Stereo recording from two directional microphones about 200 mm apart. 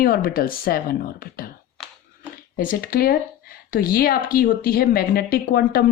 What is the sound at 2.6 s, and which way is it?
A woman's voice, 45° left (ahead or behind).